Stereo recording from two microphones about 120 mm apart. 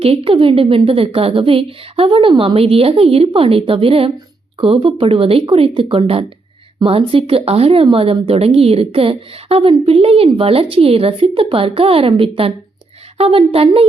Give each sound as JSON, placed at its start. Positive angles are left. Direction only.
{"t": 0.0, "sound": "a woman's voice", "side_deg": -50}